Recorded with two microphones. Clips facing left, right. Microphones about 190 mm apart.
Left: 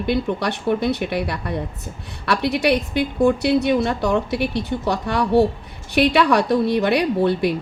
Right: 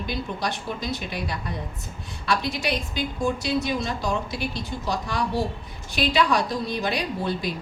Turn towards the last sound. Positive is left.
turn(degrees=65)  # may be behind; listen again after turning